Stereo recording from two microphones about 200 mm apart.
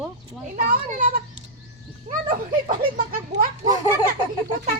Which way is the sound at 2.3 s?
45° right (ahead or behind).